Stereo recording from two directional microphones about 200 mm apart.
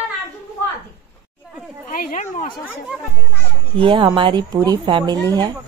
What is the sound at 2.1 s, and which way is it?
Speech, 35° left (ahead or behind).